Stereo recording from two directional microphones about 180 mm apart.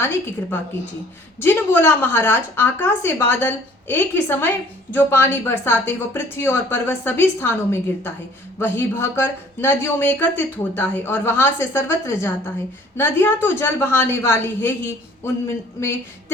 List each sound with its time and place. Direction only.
0.0 s a woman's voice: 15° left (ahead or behind)